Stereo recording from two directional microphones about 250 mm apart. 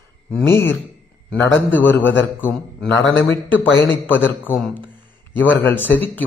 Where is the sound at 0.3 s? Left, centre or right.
Centre.